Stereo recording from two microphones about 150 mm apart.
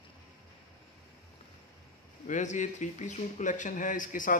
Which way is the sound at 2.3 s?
55° left (ahead or behind).